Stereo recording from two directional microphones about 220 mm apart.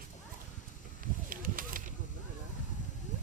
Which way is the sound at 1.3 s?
40° right (ahead or behind).